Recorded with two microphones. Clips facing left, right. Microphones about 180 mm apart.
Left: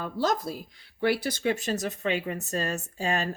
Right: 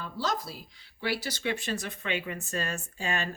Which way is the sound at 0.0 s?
50° left (ahead or behind).